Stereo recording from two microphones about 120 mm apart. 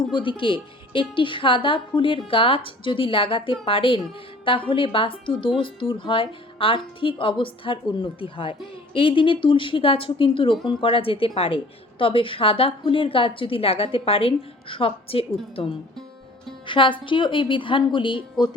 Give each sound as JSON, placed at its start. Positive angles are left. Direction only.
{"t": 0.0, "sound": "speech", "side_deg": 45}
{"t": 16.6, "sound": "speech", "side_deg": 45}